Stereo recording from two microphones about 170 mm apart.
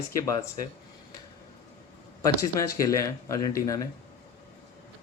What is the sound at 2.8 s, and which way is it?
Speech, 20° left (ahead or behind).